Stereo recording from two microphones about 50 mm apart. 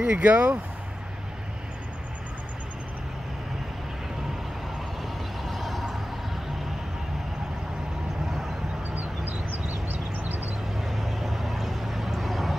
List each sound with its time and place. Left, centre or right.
0.0 s speech: right
5.4 s a sound: centre
8.9 s vehicle: right
10.8 s vehicle: centre